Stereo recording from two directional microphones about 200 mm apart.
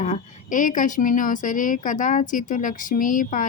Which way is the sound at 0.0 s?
40° left (ahead or behind).